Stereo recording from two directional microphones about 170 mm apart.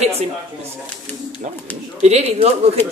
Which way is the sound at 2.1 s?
40° right (ahead or behind).